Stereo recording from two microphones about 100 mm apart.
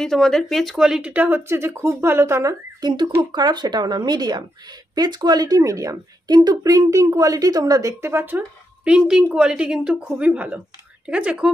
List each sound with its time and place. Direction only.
0.0 s speech: 5° left (ahead or behind); by 2.5 s 25° right (ahead or behind)
2.8 s speech: 45° right (ahead or behind)
8.0 s speech: 25° right (ahead or behind)
8.8 s speech: 10° right (ahead or behind)